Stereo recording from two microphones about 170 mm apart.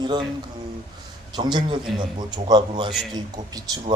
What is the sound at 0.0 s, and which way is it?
Speech, 25° right (ahead or behind).